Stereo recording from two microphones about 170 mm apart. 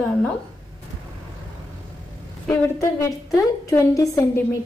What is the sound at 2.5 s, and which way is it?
A woman's voice, 15° left (ahead or behind).